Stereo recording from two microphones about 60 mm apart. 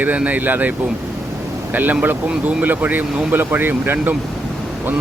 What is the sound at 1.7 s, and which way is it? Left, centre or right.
Speech, right.